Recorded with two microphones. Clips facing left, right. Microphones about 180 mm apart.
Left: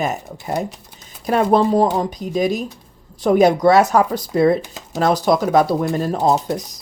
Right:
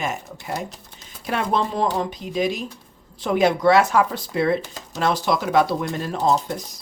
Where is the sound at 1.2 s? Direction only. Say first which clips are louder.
Left 8 dB; 40° left (ahead or behind).